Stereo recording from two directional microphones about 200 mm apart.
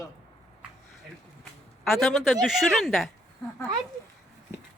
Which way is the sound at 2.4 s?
Centre (ahead or behind).